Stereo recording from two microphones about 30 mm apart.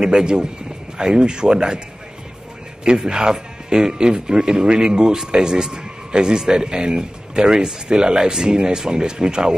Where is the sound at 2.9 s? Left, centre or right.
Right.